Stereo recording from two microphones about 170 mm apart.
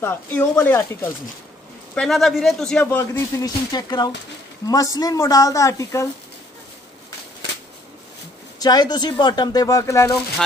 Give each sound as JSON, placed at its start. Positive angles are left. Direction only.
{"t": 0.0, "sound": "speech", "side_deg": 15}
{"t": 8.5, "sound": "speech", "side_deg": 25}